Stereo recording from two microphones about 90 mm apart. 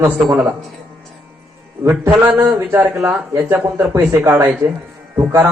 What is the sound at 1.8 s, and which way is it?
A man's voice, 20° right (ahead or behind).